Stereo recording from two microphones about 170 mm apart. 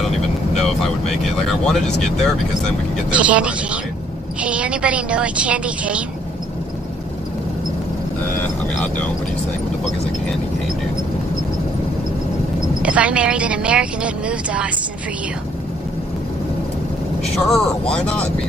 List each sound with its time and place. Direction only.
1.7 s a woman's voice: centre (ahead or behind)
8.7 s speech: 10° left (ahead or behind)
12.8 s a woman's voice: 5° right (ahead or behind)
17.5 s speech: 5° left (ahead or behind)